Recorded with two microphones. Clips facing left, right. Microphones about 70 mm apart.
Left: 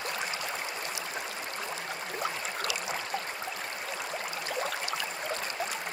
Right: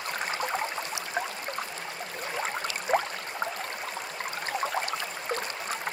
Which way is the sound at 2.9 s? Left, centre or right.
Right.